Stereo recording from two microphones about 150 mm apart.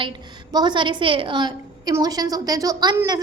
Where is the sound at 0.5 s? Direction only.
30° right (ahead or behind).